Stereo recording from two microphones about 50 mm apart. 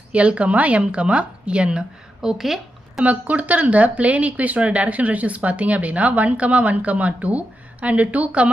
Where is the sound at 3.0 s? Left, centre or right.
Right.